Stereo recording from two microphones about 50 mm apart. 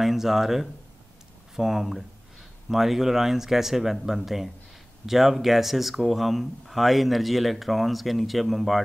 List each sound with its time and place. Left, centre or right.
0.0 s speech: centre